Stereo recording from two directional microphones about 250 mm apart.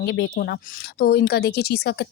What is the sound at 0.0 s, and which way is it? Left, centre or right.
A woman's voice, left.